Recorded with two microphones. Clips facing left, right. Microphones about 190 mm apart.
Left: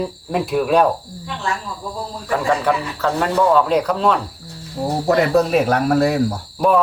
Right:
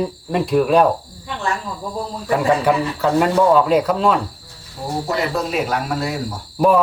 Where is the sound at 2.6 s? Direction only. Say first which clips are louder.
Right 2 dB; 10° right (ahead or behind).